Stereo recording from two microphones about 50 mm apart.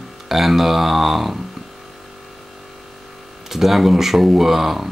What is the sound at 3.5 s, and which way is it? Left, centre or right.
Speech, centre.